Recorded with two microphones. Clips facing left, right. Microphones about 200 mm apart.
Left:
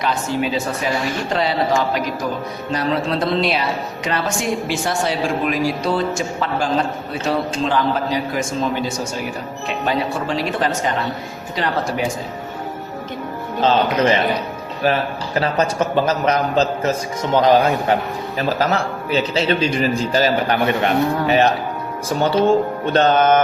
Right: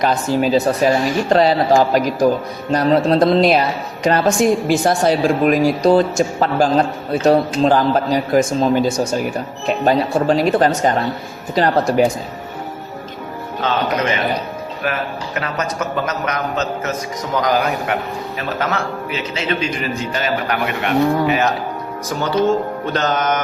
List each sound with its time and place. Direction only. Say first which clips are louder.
0.0 s speech: right 4 dB; 40° right (ahead or behind)
13.6 s a man's voice: left 3 dB; 30° left (ahead or behind)
22.9 s mantra: left 5 dB; 30° left (ahead or behind)